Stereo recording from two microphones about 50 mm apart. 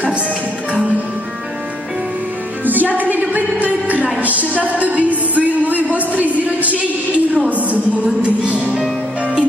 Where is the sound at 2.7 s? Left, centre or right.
Right.